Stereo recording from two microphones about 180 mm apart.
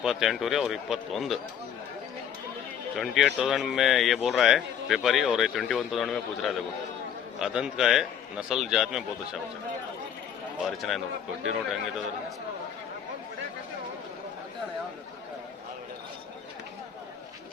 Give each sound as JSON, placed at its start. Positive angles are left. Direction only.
{"t": 0.0, "sound": "speech", "side_deg": 0}
{"t": 3.0, "sound": "speech", "side_deg": 0}
{"t": 10.7, "sound": "speech", "side_deg": 0}